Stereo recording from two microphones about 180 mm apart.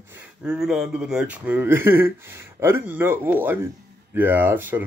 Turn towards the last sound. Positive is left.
turn(degrees=-10)  # may be behind; listen again after turning